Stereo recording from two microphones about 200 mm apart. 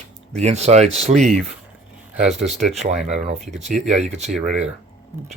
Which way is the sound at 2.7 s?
35° right (ahead or behind).